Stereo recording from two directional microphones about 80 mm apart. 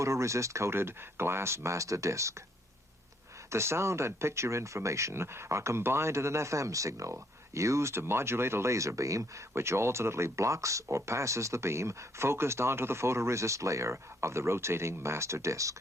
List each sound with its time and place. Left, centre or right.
0.0 s speech: right
3.5 s speech: right